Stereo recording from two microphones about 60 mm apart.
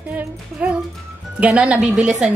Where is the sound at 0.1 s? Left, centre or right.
Right.